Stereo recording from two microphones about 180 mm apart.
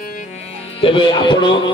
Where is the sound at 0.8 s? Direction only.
25° left (ahead or behind).